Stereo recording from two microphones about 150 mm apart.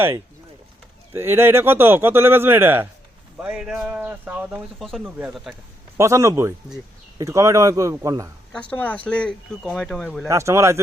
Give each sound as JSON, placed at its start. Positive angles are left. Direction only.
{"t": 1.1, "sound": "speech", "side_deg": -15}
{"t": 6.0, "sound": "a man's voice", "side_deg": -20}
{"t": 8.7, "sound": "speech", "side_deg": 10}
{"t": 10.2, "sound": "a man's voice", "side_deg": -20}